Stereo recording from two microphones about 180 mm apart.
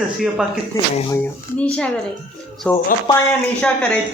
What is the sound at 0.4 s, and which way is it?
Speech, 5° right (ahead or behind).